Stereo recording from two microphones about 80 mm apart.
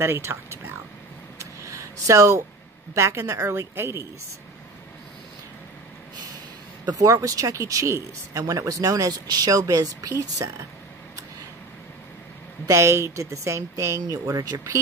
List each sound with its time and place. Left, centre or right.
0.0 s a woman's voice: right
1.4 s a sound: right
2.9 s a woman's voice: right
6.9 s speech: right
12.6 s a woman's voice: right